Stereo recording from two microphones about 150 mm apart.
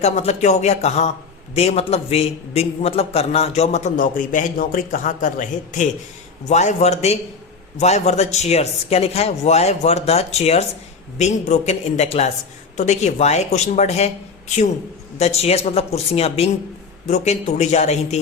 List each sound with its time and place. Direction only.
0.0 s a man's voice: 45° left (ahead or behind)